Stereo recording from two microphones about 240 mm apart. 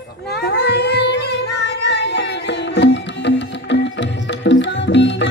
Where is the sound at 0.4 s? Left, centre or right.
Left.